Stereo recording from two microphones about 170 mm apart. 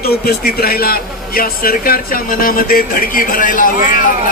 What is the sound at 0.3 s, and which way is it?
Speech, 60° left (ahead or behind).